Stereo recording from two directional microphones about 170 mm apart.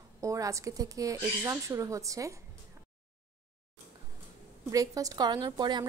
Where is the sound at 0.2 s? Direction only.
20° right (ahead or behind).